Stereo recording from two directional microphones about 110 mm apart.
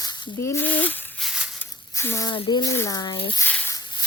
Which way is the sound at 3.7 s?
45° left (ahead or behind).